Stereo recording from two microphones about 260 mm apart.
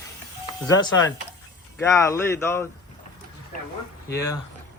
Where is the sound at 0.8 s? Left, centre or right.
Centre.